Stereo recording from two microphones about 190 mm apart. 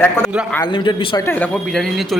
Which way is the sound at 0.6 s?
25° left (ahead or behind).